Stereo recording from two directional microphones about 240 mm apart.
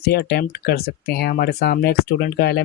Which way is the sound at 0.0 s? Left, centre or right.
Left.